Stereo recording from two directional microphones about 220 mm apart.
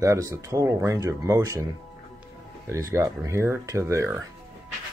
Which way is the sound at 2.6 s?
15° right (ahead or behind).